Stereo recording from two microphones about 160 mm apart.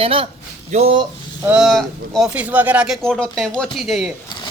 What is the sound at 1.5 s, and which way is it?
Speech, centre (ahead or behind).